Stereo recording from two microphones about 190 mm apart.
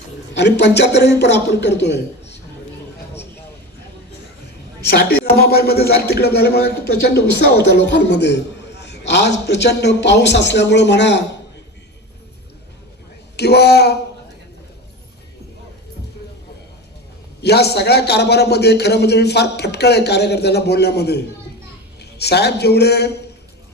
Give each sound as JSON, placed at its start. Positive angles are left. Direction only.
{"t": 0.3, "sound": "a man's voice", "side_deg": 65}
{"t": 4.9, "sound": "a man's voice", "side_deg": 60}
{"t": 13.3, "sound": "a man's voice", "side_deg": 60}
{"t": 17.4, "sound": "a man's voice", "side_deg": 60}
{"t": 22.2, "sound": "a man's voice", "side_deg": 60}